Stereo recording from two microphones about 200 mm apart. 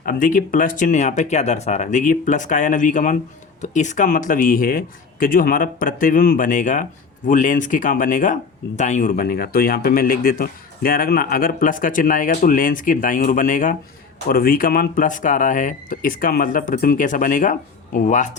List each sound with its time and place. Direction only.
0.0 s speech: 45° left (ahead or behind)